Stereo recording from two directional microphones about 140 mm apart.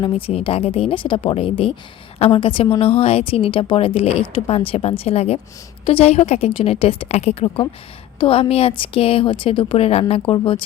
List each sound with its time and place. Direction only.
0.0 s a woman's voice: 40° left (ahead or behind)